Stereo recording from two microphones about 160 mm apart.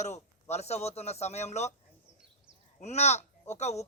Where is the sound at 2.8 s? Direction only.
45° left (ahead or behind).